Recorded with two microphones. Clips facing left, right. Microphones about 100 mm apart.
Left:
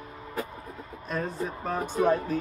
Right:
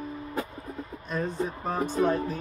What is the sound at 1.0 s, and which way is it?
Speech, centre (ahead or behind).